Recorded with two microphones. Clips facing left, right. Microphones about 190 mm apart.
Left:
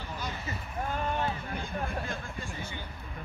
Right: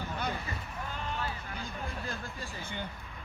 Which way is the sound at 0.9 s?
50° left (ahead or behind).